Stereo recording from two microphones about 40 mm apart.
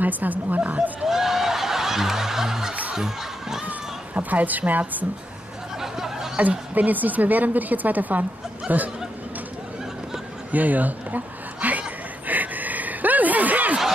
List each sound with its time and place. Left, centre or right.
0.0 s a woman's voice: right
1.0 s snicker: centre
3.0 s crowd: centre
3.6 s speech: right
5.8 s a sound: centre
6.7 s a woman's voice: right
10.5 s a sound: right